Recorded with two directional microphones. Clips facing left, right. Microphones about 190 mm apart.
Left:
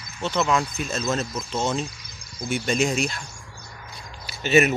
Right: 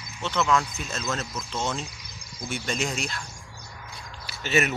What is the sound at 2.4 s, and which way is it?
Speech, 15° left (ahead or behind).